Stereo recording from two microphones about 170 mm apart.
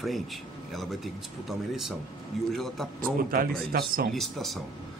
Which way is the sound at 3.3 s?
60° right (ahead or behind).